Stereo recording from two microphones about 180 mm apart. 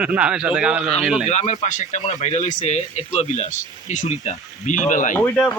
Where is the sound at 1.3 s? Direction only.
40° left (ahead or behind).